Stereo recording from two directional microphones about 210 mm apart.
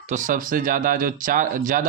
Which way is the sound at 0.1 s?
40° right (ahead or behind).